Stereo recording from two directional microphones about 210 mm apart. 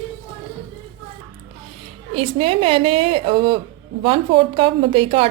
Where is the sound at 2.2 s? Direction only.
30° right (ahead or behind).